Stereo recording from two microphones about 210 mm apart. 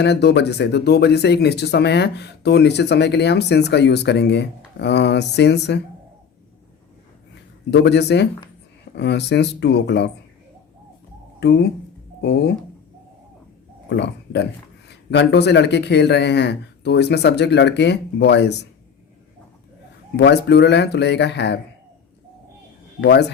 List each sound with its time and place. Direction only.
0.0 s speech: 55° left (ahead or behind)
7.7 s speech: 55° left (ahead or behind)
11.3 s speech: 50° left (ahead or behind)
13.9 s speech: 55° left (ahead or behind)
20.1 s speech: 55° left (ahead or behind)